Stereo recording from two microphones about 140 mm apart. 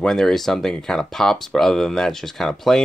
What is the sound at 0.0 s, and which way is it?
Speech, 5° left (ahead or behind).